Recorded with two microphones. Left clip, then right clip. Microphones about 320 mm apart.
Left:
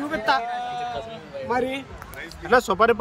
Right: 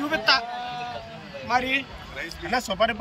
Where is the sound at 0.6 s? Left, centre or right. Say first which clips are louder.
Left 3 dB; left.